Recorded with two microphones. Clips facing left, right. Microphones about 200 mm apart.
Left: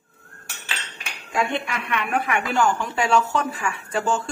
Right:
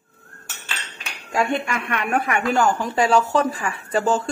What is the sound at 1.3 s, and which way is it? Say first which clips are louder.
A woman's voice: right 3 dB; 45° right (ahead or behind).